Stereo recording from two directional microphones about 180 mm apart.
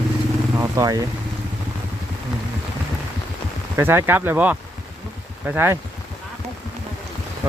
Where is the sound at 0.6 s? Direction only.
20° right (ahead or behind).